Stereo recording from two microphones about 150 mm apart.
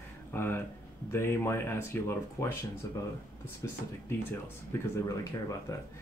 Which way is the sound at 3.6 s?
15° left (ahead or behind).